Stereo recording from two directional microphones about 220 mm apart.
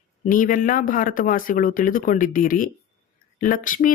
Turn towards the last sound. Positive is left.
turn(degrees=35)  # may be behind; listen again after turning